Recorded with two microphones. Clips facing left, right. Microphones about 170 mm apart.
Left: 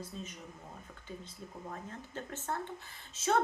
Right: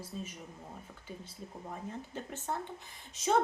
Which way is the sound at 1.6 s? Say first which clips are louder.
Right 4 dB; 15° right (ahead or behind).